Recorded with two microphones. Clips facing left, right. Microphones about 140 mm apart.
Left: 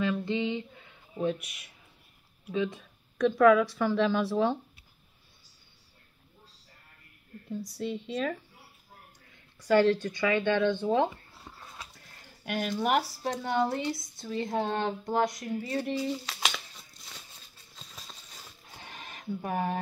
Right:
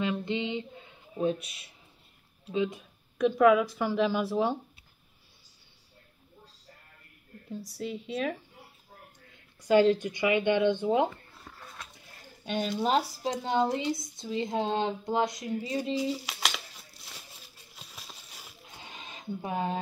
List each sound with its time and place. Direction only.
0.0 s speech: 20° right (ahead or behind)
3.2 s speech: 10° right (ahead or behind)
7.7 s speech: 5° right (ahead or behind)
9.7 s speech: 20° right (ahead or behind)
11.1 s dog: 15° left (ahead or behind)
12.4 s speech: 20° right (ahead or behind)
16.3 s crumpling: centre (ahead or behind)
17.7 s a sound: 10° right (ahead or behind)